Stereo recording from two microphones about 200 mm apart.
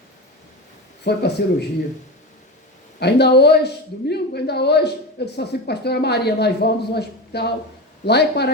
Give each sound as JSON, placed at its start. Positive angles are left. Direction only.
{"t": 1.0, "sound": "a woman's voice", "side_deg": 55}
{"t": 3.0, "sound": "a woman's voice", "side_deg": 55}